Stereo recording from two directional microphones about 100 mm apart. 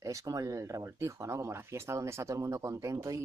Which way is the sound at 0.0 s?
35° right (ahead or behind).